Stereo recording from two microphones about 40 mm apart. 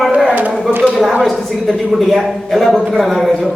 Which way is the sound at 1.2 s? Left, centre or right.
Centre.